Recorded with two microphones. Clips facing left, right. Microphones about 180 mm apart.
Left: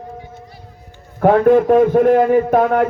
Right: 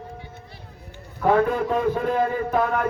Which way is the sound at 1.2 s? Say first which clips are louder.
Left 9 dB; 50° left (ahead or behind).